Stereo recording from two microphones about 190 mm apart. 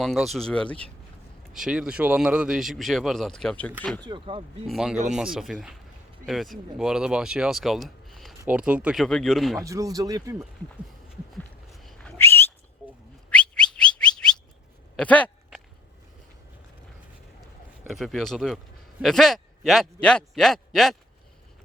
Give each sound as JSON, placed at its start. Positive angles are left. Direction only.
{"t": 0.0, "sound": "speech", "side_deg": 0}
{"t": 4.0, "sound": "speech", "side_deg": -25}
{"t": 4.7, "sound": "speech", "side_deg": -5}
{"t": 9.6, "sound": "speech", "side_deg": -15}
{"t": 11.7, "sound": "a sound", "side_deg": 0}
{"t": 13.3, "sound": "whistling", "side_deg": 5}
{"t": 14.9, "sound": "a sound", "side_deg": 5}
{"t": 17.8, "sound": "speech", "side_deg": 0}